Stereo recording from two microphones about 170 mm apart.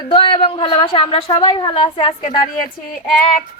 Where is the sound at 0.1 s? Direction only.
30° left (ahead or behind).